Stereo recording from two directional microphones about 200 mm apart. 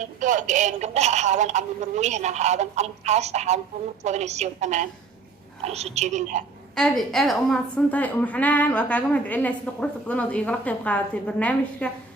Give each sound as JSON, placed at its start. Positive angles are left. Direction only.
{"t": 0.0, "sound": "speech", "side_deg": -40}
{"t": 6.7, "sound": "a woman's voice", "side_deg": 0}